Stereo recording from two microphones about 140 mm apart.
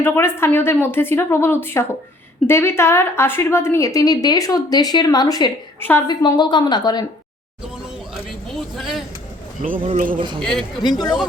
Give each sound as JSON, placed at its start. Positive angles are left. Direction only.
{"t": 0.0, "sound": "a woman's voice", "side_deg": 15}
{"t": 8.7, "sound": "speech", "side_deg": 0}
{"t": 9.6, "sound": "a man's voice", "side_deg": -75}
{"t": 10.4, "sound": "speech", "side_deg": 0}
{"t": 10.9, "sound": "a woman's voice", "side_deg": 30}